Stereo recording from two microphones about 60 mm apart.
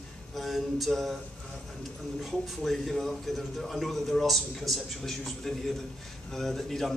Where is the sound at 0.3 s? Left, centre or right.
Centre.